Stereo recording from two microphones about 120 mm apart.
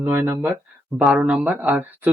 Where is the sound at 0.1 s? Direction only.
20° right (ahead or behind).